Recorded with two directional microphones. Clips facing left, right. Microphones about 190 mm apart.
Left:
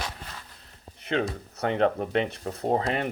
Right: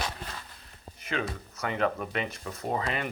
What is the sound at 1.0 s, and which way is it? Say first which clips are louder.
Speech: left 5 dB; 65° left (ahead or behind).